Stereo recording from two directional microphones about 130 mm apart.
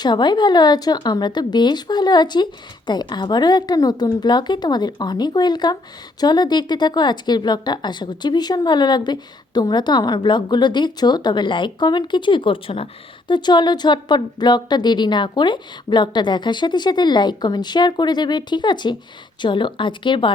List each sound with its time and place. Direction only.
0.0 s speech: 35° left (ahead or behind)